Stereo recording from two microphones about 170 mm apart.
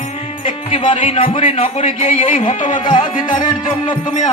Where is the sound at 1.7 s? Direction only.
35° left (ahead or behind).